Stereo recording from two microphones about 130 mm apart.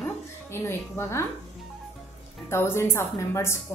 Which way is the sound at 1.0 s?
20° left (ahead or behind).